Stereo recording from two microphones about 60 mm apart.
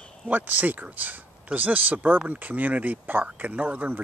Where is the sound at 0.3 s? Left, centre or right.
Right.